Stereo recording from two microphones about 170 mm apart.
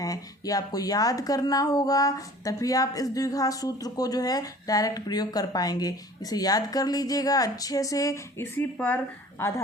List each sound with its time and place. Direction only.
0.0 s speech: 20° left (ahead or behind)